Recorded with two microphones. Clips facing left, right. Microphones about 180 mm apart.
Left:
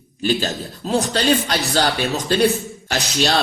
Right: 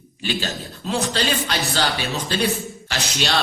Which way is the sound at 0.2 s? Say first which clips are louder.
Left 6 dB; 40° left (ahead or behind).